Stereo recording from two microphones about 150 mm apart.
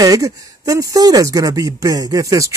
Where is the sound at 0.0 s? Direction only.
25° right (ahead or behind).